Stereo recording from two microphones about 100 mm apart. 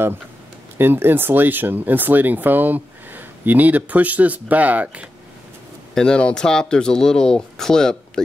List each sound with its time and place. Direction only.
0.7 s speech: 20° right (ahead or behind)
5.9 s speech: 10° left (ahead or behind)